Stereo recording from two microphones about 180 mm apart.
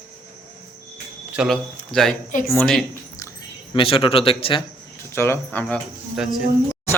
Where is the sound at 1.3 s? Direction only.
Centre (ahead or behind).